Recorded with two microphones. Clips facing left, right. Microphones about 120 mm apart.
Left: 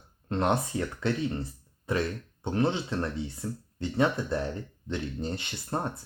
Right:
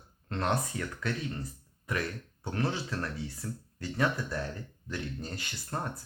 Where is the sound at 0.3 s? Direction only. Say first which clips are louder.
Left 4 dB; 25° left (ahead or behind).